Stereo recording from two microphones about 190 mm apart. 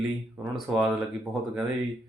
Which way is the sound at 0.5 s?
5° right (ahead or behind).